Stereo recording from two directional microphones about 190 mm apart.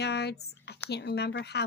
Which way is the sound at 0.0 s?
60° left (ahead or behind).